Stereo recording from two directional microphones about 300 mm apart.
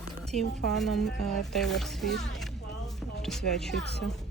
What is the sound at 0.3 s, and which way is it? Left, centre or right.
Speech, centre.